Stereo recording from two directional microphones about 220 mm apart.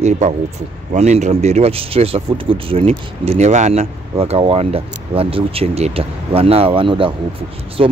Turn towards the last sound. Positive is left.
turn(degrees=-25)  # may be behind; listen again after turning